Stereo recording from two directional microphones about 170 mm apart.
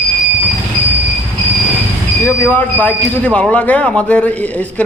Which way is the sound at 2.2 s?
10° left (ahead or behind).